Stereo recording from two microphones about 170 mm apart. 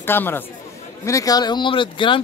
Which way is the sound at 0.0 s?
15° left (ahead or behind).